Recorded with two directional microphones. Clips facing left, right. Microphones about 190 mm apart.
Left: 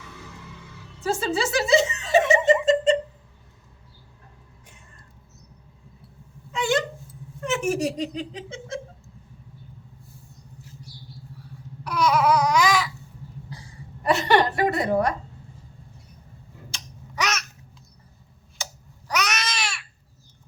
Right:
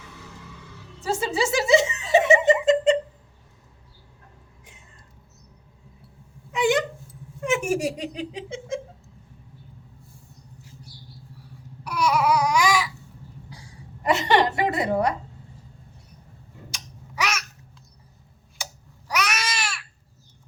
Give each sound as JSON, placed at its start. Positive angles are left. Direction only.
{"t": 1.0, "sound": "snicker", "side_deg": -20}
{"t": 6.5, "sound": "a sound", "side_deg": -15}
{"t": 7.4, "sound": "speech", "side_deg": -10}
{"t": 11.9, "sound": "babbling", "side_deg": -10}
{"t": 14.0, "sound": "chuckle", "side_deg": -20}
{"t": 16.7, "sound": "babbling", "side_deg": -10}
{"t": 18.5, "sound": "a sound", "side_deg": -10}